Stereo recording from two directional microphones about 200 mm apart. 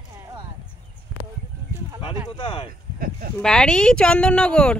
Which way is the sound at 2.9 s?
45° right (ahead or behind).